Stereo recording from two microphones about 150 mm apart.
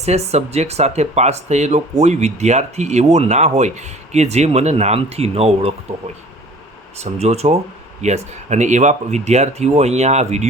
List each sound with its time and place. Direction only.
0.0 s speech: 45° right (ahead or behind)
7.0 s speech: 45° right (ahead or behind)